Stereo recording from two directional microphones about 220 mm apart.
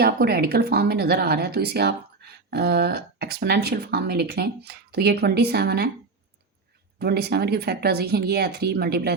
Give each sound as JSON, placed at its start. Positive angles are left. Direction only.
{"t": 0.0, "sound": "speech", "side_deg": -45}
{"t": 7.0, "sound": "speech", "side_deg": -45}